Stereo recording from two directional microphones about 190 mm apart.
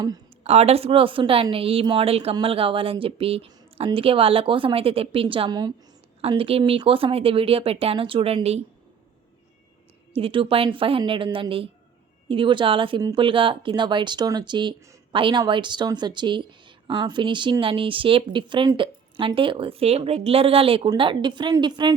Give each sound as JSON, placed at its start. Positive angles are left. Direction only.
{"t": 0.4, "sound": "speech", "side_deg": -35}
{"t": 10.2, "sound": "speech", "side_deg": -30}